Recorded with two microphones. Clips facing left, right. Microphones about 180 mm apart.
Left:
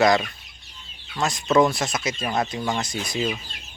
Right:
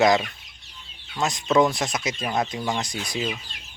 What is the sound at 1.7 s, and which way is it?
Speech, 15° right (ahead or behind).